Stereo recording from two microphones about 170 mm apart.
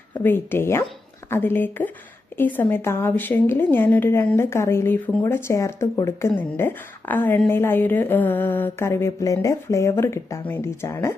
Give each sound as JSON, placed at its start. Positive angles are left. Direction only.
{"t": 0.2, "sound": "a woman's voice", "side_deg": 10}